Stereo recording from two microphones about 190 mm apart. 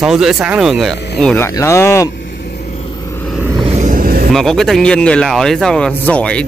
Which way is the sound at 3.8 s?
45° right (ahead or behind).